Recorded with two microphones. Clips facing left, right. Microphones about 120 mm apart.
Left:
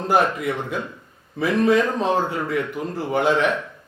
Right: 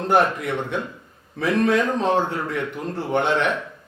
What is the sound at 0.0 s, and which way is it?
A man's voice, centre (ahead or behind).